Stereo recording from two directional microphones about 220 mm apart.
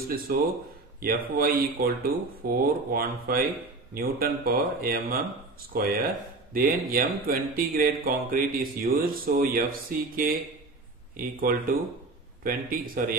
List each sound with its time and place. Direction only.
0.3 s speech: 40° right (ahead or behind)